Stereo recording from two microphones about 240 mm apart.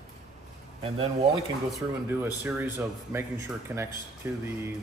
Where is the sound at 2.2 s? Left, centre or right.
Centre.